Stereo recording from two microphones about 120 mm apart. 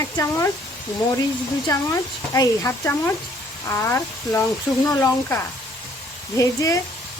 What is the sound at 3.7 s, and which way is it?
Speech, 25° left (ahead or behind).